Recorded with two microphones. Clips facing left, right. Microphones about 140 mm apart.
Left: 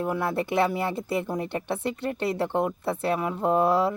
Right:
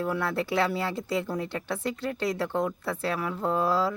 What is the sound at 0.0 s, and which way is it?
A woman's voice, 20° left (ahead or behind).